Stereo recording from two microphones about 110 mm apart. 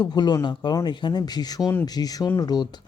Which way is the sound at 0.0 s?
40° left (ahead or behind).